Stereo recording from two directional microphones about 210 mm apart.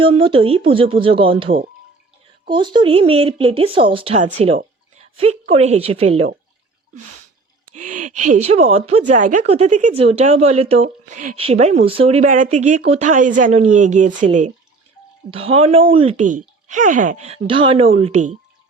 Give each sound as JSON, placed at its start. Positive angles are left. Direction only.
{"t": 0.0, "sound": "speech", "side_deg": -25}
{"t": 7.8, "sound": "speech", "side_deg": -40}